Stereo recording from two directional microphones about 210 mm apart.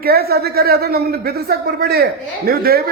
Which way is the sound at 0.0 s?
45° right (ahead or behind).